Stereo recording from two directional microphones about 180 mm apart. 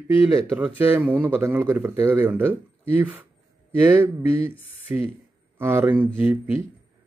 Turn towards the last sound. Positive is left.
turn(degrees=-10)  # may be behind; listen again after turning